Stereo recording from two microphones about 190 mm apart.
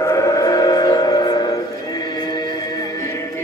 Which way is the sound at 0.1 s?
20° left (ahead or behind).